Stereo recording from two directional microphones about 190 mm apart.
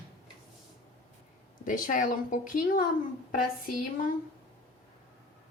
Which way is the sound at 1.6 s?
45° left (ahead or behind).